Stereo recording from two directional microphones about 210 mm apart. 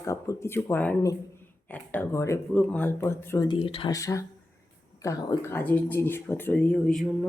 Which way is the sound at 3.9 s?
15° left (ahead or behind).